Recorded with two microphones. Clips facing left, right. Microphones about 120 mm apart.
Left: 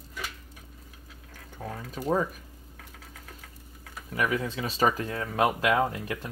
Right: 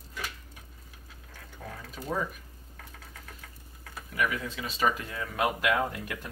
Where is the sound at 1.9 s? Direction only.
40° left (ahead or behind).